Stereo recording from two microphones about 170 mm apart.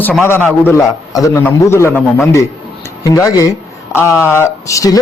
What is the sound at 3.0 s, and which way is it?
A man's voice, 20° left (ahead or behind).